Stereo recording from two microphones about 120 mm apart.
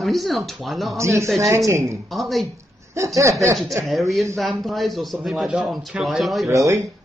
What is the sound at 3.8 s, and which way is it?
Speech, centre (ahead or behind).